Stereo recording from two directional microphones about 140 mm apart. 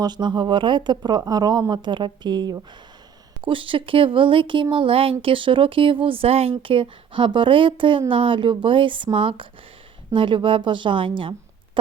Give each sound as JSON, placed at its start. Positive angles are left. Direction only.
{"t": 0.0, "sound": "a woman's voice", "side_deg": -30}